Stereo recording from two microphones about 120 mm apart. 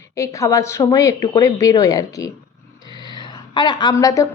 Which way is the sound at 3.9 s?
30° left (ahead or behind).